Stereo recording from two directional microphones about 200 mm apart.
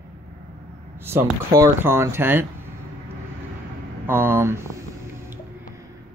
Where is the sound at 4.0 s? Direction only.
10° right (ahead or behind).